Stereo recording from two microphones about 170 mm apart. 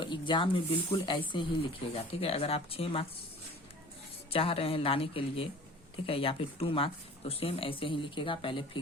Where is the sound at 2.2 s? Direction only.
35° left (ahead or behind).